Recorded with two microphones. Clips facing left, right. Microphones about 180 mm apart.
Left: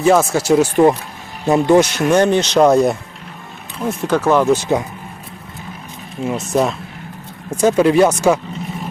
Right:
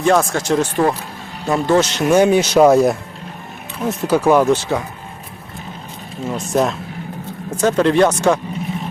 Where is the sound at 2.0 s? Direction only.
10° right (ahead or behind).